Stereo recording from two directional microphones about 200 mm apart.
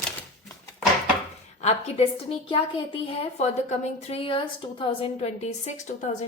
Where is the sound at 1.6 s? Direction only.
35° left (ahead or behind).